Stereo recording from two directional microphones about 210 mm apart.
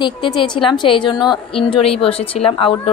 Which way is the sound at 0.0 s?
20° left (ahead or behind).